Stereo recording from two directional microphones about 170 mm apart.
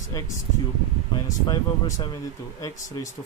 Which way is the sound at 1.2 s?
25° left (ahead or behind).